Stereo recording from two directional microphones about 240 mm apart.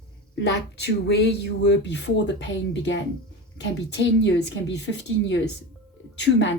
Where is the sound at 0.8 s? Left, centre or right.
Left.